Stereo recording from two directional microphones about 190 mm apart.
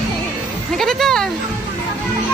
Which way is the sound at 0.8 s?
Centre (ahead or behind).